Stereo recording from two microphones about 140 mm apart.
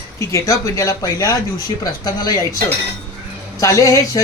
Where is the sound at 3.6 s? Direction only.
25° left (ahead or behind).